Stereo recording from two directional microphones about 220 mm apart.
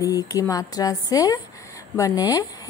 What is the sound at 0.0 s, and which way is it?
A woman's voice, 15° left (ahead or behind).